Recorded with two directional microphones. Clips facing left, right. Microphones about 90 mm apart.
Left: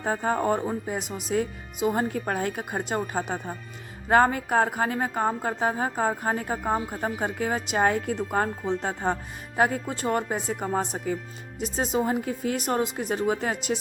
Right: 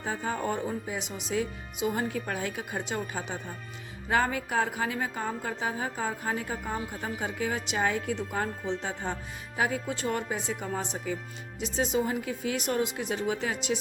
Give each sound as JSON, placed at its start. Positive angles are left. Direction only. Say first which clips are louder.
{"t": 0.0, "sound": "a woman's voice", "louder": "left 6 dB", "side_deg": 45}